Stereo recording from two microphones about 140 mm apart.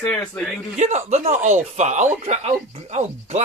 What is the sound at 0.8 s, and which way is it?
Speech, 55° right (ahead or behind).